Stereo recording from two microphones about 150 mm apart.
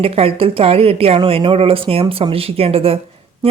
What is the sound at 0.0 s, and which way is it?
Speech, 40° right (ahead or behind).